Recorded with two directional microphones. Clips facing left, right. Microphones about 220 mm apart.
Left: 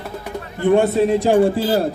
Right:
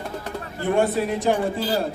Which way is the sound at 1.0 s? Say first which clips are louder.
Left 8 dB; 25° left (ahead or behind).